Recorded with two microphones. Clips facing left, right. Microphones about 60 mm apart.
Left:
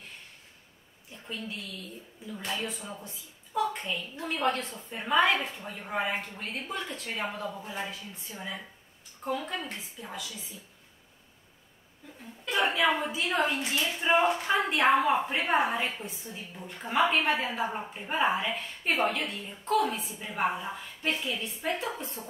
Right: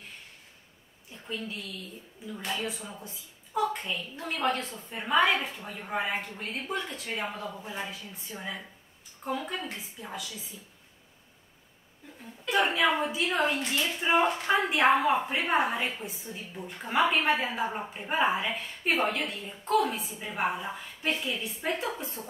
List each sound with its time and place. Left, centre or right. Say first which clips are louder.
1.1 s a woman's voice: right 2 dB; centre
13.0 s a woman's voice: right 1 dB; centre